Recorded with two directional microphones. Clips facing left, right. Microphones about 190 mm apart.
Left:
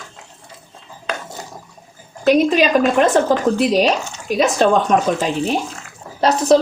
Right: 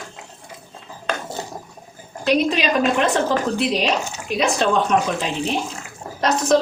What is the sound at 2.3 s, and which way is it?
A woman's voice, 45° left (ahead or behind).